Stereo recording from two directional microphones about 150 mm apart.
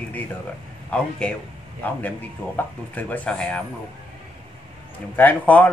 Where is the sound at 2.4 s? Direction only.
10° left (ahead or behind).